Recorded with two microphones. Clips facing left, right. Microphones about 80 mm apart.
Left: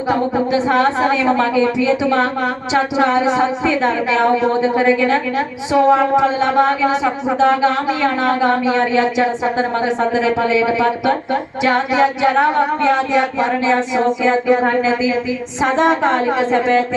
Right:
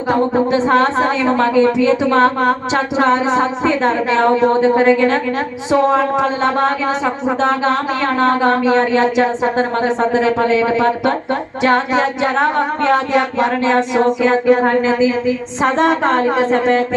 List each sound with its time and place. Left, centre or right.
0.1 s speech: right
11.6 s a sound: right
15.6 s speech: right